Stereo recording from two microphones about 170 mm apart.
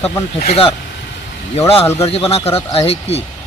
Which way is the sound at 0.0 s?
35° left (ahead or behind).